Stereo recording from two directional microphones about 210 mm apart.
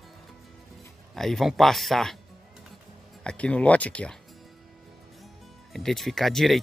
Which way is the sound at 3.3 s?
5° left (ahead or behind).